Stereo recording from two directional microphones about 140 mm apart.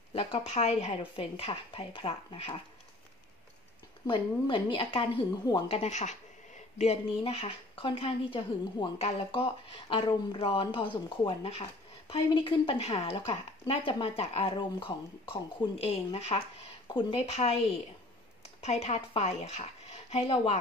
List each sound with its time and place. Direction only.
0.1 s speech: 45° left (ahead or behind)
4.1 s a woman's voice: 35° left (ahead or behind)
5.7 s speech: 50° left (ahead or behind); by 8.8 s 35° left (ahead or behind)
8.9 s a woman's voice: 45° left (ahead or behind)
16.8 s speech: 35° left (ahead or behind)
17.3 s speech: 50° left (ahead or behind)
18.6 s speech: 50° left (ahead or behind)